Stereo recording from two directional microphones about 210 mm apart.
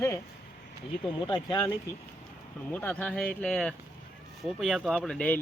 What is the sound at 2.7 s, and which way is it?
Speech, 10° left (ahead or behind).